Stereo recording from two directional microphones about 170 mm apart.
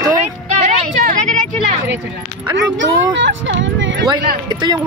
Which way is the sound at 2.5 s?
90° right.